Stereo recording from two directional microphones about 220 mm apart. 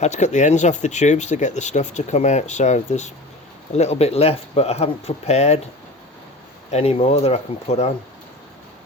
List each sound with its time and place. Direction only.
0.0 s speech: 30° left (ahead or behind)
6.7 s speech: 30° left (ahead or behind)